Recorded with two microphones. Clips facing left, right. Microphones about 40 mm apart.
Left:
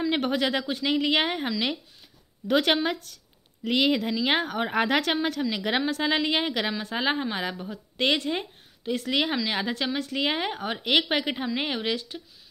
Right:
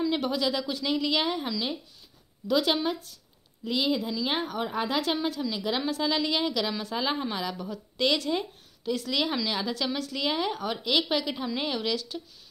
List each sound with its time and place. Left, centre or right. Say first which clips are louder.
0.1 s a woman's voice: left 2 dB; left